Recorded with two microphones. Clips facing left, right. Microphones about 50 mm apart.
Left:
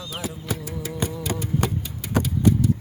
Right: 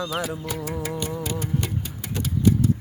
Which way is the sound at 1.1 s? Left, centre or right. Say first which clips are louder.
Even; right.